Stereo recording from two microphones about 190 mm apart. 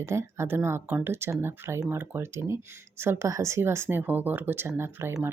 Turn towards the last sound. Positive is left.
turn(degrees=-15)  # may be behind; listen again after turning